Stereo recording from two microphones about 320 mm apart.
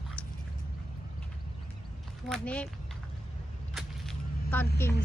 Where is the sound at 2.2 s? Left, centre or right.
Centre.